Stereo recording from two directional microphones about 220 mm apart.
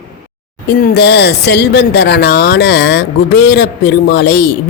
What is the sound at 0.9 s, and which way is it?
Speech, 50° left (ahead or behind).